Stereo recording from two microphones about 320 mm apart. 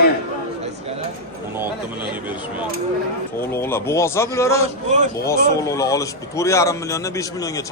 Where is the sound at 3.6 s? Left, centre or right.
Centre.